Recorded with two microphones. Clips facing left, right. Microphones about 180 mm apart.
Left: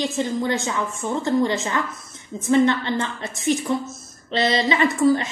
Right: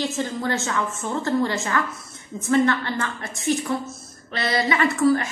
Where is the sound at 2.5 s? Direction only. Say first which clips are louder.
Left 2 dB; 20° left (ahead or behind).